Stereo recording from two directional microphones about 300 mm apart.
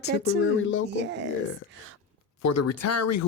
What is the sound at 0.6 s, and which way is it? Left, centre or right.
Speech, left.